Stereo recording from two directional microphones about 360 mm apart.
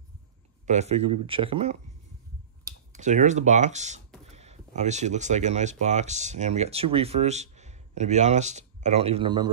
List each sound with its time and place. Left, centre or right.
0.7 s speech: centre